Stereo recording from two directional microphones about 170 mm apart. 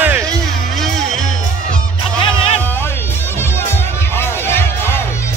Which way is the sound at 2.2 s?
30° left (ahead or behind).